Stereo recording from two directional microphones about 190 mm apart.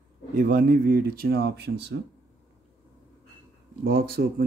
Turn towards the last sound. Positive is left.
turn(degrees=-55)  # may be behind; listen again after turning